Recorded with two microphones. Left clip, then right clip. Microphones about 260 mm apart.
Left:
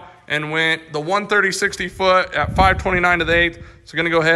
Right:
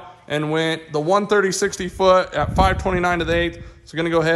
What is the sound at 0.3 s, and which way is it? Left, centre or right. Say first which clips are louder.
A man's voice: left 2 dB; centre.